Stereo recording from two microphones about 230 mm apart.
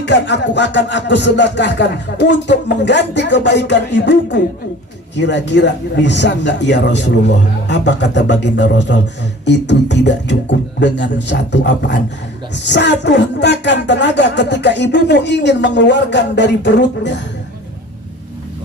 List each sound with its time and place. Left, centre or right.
0.0 s speech: left